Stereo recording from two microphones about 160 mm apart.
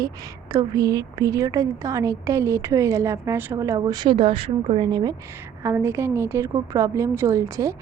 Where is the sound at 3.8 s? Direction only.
25° right (ahead or behind).